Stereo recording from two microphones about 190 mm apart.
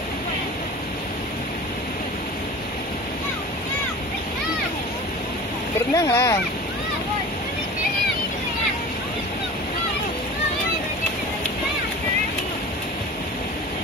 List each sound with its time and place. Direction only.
5.9 s speech: 15° left (ahead or behind)